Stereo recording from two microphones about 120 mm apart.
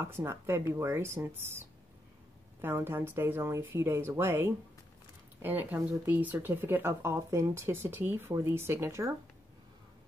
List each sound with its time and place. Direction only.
0.0 s speech: 20° right (ahead or behind)